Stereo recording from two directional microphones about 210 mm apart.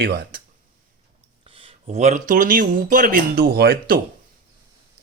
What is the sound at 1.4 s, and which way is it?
Speech, 25° right (ahead or behind).